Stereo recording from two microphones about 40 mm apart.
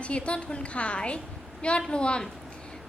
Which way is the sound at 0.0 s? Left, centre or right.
Left.